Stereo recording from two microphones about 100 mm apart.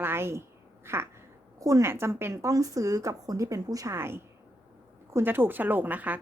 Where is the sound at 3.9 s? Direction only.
25° right (ahead or behind).